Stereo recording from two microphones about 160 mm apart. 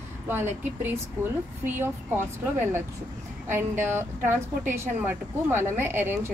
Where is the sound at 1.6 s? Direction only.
10° right (ahead or behind).